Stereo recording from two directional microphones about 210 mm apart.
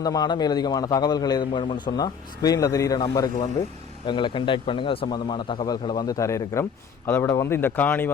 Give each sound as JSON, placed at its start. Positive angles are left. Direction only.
{"t": 0.0, "sound": "a man's voice", "side_deg": 20}